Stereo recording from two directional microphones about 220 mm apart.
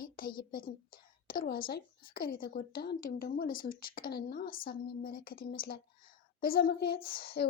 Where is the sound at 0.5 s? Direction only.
40° left (ahead or behind).